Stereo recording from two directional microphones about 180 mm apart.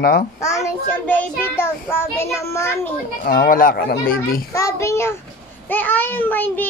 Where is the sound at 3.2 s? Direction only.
50° left (ahead or behind).